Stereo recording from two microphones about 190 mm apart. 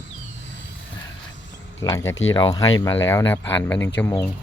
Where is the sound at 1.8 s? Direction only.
15° left (ahead or behind).